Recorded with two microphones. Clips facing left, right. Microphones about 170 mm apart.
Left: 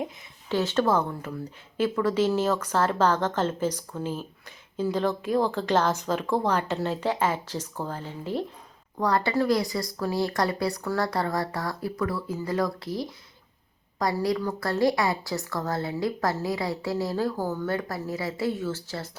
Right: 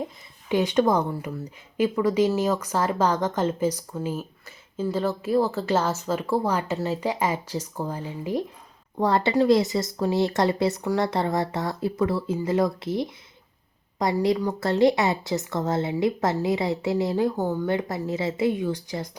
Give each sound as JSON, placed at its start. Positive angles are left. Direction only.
{"t": 0.4, "sound": "a woman's voice", "side_deg": -15}
{"t": 9.0, "sound": "speech", "side_deg": -25}